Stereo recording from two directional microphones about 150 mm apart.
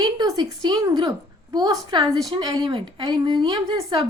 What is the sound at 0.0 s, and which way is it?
A woman's voice, 25° right (ahead or behind).